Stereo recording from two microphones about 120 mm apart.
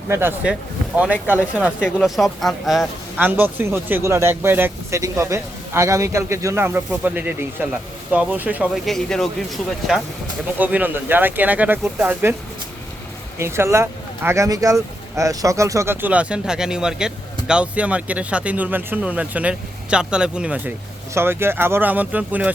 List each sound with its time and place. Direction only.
0.1 s speech: 20° right (ahead or behind); by 2.8 s centre (ahead or behind)
3.2 s speech: 15° right (ahead or behind)
8.7 s speech: 5° left (ahead or behind)
10.6 s speech: 15° right (ahead or behind)
13.4 s speech: 20° right (ahead or behind)
21.1 s speech: 20° right (ahead or behind)